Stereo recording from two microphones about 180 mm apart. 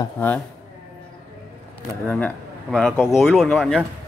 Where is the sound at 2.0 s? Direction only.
5° left (ahead or behind).